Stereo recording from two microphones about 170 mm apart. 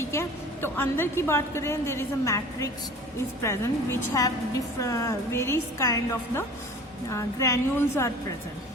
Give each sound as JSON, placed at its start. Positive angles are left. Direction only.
{"t": 0.0, "sound": "a woman's voice", "side_deg": 15}